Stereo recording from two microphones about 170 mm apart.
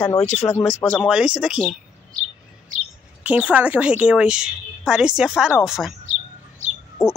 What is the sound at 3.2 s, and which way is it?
A woman's voice, 10° right (ahead or behind).